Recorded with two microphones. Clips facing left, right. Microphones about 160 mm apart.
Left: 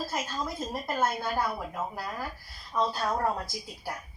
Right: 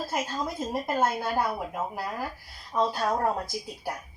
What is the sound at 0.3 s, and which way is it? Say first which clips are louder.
Speech: right 3 dB; 25° right (ahead or behind).